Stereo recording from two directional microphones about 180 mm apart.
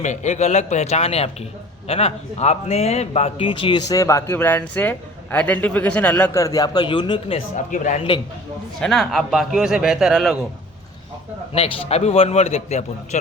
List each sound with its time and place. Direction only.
0.0 s a man's voice: 40° left (ahead or behind)
7.7 s a man's voice: 40° left (ahead or behind)
8.8 s speech: centre (ahead or behind)
11.5 s a man's voice: 35° left (ahead or behind)